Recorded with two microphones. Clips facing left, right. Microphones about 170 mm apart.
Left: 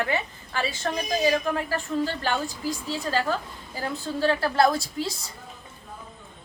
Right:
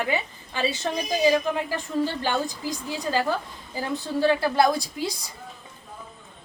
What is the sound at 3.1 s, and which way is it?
Speech, 15° right (ahead or behind).